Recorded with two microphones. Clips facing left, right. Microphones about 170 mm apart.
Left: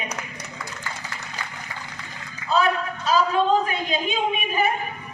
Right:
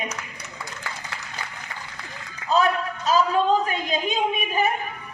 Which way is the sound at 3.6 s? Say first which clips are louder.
Even; 40° right (ahead or behind).